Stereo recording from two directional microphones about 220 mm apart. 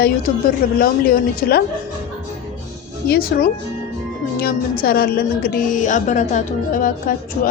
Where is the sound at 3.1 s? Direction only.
45° left (ahead or behind).